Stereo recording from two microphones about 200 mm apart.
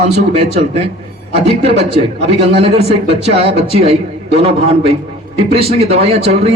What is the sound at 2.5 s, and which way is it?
Speech, 30° right (ahead or behind).